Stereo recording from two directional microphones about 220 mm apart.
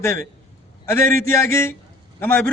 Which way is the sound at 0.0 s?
10° left (ahead or behind).